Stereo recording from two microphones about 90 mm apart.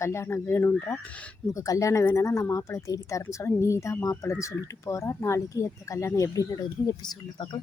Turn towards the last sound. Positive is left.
turn(degrees=60)  # may be behind; listen again after turning